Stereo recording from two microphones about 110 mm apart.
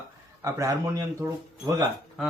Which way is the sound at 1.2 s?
20° right (ahead or behind).